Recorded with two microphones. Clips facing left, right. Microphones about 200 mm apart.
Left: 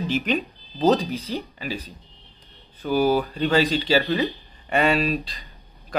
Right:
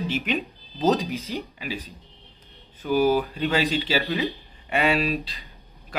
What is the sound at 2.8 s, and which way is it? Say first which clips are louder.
Speech: even; 35° left (ahead or behind).